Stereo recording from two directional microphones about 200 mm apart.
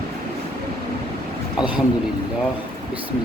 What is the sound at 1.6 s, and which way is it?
Speech, 5° right (ahead or behind).